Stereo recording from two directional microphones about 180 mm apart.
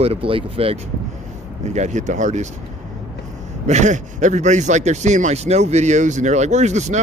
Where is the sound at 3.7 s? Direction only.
40° right (ahead or behind).